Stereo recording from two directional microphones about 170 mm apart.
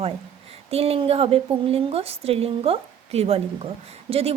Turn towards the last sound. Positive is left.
turn(degrees=-35)  # may be behind; listen again after turning